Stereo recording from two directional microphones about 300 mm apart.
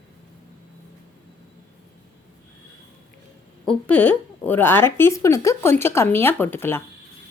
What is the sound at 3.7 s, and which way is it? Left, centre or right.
Speech, centre.